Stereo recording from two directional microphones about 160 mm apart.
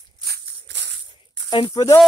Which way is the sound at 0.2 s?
85° right.